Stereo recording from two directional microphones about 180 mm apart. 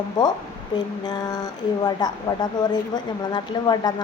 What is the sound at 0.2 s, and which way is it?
Speech, 20° left (ahead or behind).